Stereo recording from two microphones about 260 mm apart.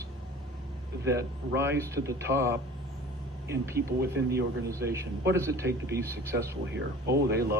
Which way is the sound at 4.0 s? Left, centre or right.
Right.